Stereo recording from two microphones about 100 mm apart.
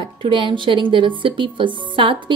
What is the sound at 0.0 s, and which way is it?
A woman's voice, 55° right (ahead or behind).